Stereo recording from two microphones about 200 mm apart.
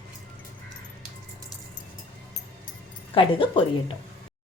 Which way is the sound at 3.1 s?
25° left (ahead or behind).